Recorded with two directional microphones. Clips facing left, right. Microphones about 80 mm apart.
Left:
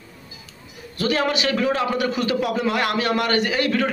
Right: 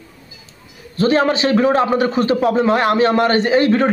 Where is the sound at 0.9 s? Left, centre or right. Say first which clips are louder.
Right 7 dB; right.